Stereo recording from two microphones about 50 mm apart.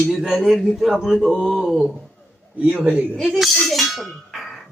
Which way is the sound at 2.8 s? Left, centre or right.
Right.